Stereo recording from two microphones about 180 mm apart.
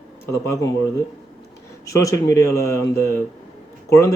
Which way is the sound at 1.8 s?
15° left (ahead or behind).